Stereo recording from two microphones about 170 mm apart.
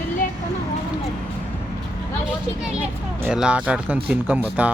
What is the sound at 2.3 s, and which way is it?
Speech, 5° right (ahead or behind).